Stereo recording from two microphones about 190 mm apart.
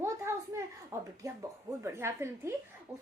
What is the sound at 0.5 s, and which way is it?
A woman's voice, 15° right (ahead or behind).